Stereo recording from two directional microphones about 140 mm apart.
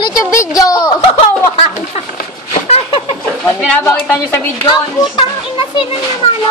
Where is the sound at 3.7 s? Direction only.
10° left (ahead or behind).